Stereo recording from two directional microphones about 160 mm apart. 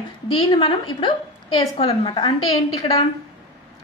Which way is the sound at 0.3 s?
35° left (ahead or behind).